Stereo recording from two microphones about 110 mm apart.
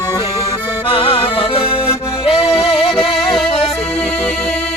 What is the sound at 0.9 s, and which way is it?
Music, 50° left (ahead or behind).